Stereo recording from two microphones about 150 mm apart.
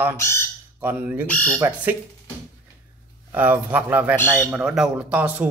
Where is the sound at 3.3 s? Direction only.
10° right (ahead or behind).